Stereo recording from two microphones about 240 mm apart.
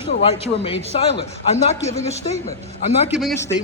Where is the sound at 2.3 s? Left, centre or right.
Right.